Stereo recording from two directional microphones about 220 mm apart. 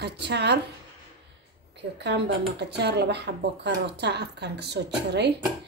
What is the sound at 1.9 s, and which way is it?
Speech, 50° right (ahead or behind).